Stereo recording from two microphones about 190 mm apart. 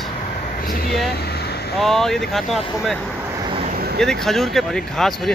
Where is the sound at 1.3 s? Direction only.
55° left (ahead or behind).